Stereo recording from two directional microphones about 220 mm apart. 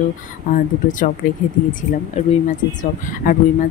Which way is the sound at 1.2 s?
40° left (ahead or behind).